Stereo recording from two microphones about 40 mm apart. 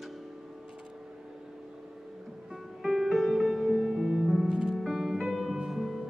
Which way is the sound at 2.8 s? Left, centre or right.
Centre.